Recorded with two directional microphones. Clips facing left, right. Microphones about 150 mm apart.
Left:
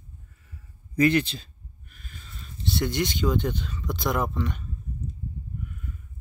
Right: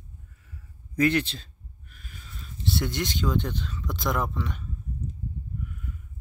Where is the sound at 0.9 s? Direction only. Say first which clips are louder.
Left 2 dB; centre (ahead or behind).